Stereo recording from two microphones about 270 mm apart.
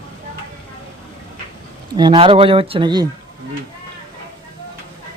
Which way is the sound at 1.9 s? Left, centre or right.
Centre.